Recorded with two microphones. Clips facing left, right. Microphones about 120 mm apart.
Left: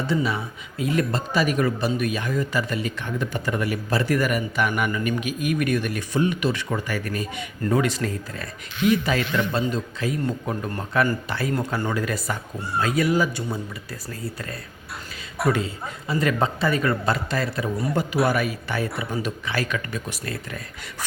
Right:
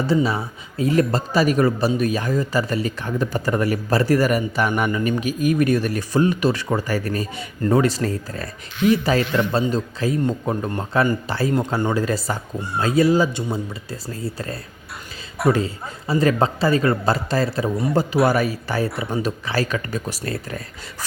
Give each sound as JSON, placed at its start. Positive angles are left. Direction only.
{"t": 0.0, "sound": "speech", "side_deg": -35}